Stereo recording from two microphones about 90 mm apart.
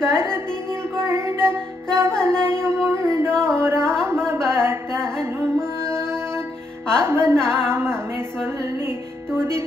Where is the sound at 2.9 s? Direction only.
35° right (ahead or behind).